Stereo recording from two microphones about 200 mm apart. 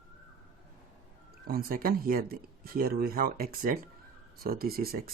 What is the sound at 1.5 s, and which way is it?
Speech, 45° right (ahead or behind).